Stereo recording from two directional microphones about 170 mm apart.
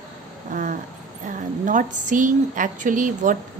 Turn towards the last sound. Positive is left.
turn(degrees=-50)  # may be behind; listen again after turning